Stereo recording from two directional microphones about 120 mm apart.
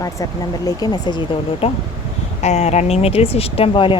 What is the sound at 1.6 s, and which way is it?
Speech, 55° left (ahead or behind).